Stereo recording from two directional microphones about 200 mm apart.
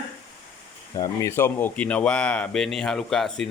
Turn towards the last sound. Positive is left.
turn(degrees=0)  # may be behind; listen again after turning